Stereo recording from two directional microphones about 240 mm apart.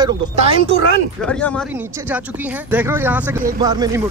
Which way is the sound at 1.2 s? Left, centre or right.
Centre.